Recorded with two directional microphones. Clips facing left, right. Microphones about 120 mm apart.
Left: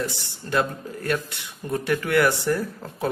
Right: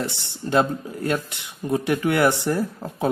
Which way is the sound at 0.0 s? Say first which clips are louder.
Right 1 dB; 25° right (ahead or behind).